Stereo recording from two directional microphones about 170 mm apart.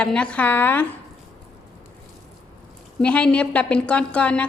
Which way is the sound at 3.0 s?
5° left (ahead or behind).